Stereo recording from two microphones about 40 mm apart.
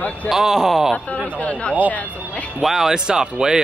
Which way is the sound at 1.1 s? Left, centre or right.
Left.